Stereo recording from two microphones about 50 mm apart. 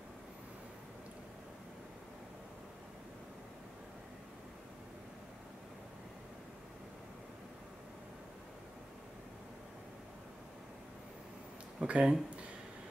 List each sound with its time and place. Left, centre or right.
11.8 s speech: right